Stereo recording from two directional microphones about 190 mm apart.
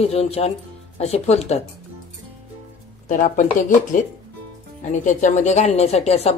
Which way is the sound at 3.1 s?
40° left (ahead or behind).